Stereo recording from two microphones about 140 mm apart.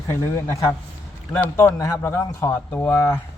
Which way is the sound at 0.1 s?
20° left (ahead or behind).